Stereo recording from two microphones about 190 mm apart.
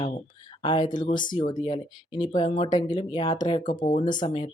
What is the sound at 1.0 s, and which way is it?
Speech, 45° left (ahead or behind).